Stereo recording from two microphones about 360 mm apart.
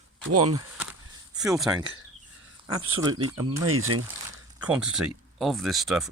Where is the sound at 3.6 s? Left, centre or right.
Right.